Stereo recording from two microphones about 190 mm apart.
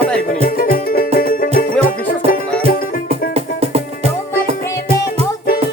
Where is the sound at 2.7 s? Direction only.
50° left (ahead or behind).